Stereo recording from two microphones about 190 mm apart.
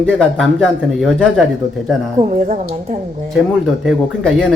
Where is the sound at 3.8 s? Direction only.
Centre (ahead or behind).